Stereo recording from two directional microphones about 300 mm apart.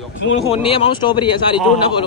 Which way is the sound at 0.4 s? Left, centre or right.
Centre.